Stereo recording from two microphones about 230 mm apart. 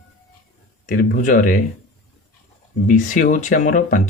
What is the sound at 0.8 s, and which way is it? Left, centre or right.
Speech, left.